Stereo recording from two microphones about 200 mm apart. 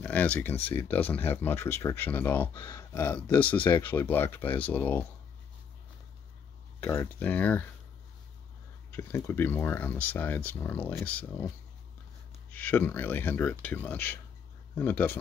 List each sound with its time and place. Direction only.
0.0 s speech: 5° left (ahead or behind)
3.6 s speech: 20° left (ahead or behind)
3.9 s speech: 10° left (ahead or behind)
6.8 s speech: 10° left (ahead or behind)
8.9 s speech: 10° left (ahead or behind)
12.4 s speech: 10° left (ahead or behind)